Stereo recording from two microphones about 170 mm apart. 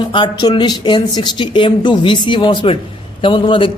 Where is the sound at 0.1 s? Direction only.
25° left (ahead or behind).